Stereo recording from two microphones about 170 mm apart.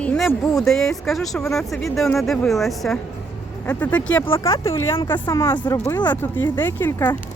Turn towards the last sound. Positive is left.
turn(degrees=10)  # may be behind; listen again after turning